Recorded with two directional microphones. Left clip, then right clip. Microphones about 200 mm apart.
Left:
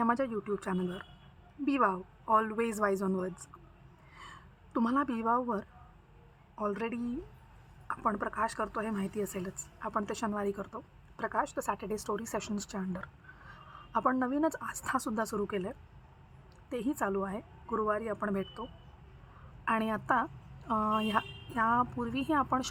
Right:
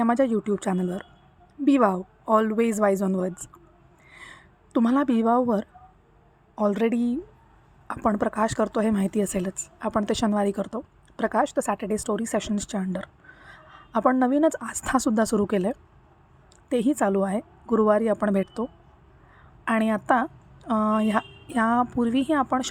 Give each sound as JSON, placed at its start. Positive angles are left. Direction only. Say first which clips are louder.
{"t": 0.0, "sound": "a woman's voice", "louder": "right 8 dB", "side_deg": -20}
{"t": 4.1, "sound": "a sound", "louder": "right 6 dB", "side_deg": -15}
{"t": 6.6, "sound": "a woman's voice", "louder": "right 11 dB", "side_deg": -20}